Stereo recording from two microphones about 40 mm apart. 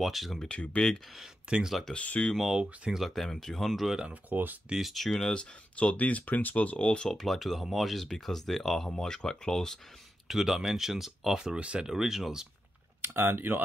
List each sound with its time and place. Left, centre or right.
0.0 s speech: centre
0.5 s speech: left
1.5 s speech: right
2.0 s speech: left
2.5 s speech: centre
3.2 s speech: centre
4.1 s speech: right
4.9 s speech: centre
5.3 s speech: left
7.2 s speech: centre
10.2 s speech: centre
11.3 s speech: right
11.9 s speech: centre
13.0 s speech: right